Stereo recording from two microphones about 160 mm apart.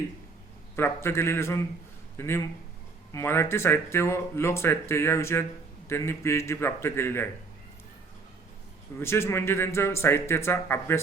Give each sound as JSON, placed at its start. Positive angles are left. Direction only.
{"t": 0.8, "sound": "speech", "side_deg": 15}
{"t": 9.0, "sound": "speech", "side_deg": 15}